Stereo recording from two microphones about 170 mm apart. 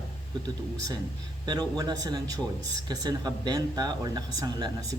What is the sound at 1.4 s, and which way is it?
Speech, 25° right (ahead or behind).